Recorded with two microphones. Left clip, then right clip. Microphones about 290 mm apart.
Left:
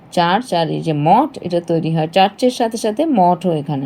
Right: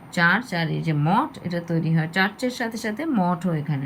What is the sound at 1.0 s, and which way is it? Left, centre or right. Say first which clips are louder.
Speech: left 10 dB; left.